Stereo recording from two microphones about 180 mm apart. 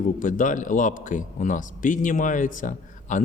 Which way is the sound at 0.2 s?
45° left (ahead or behind).